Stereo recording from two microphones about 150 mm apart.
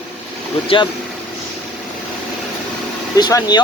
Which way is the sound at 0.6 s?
35° left (ahead or behind).